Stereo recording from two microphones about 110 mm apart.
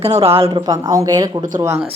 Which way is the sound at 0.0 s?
65° right (ahead or behind).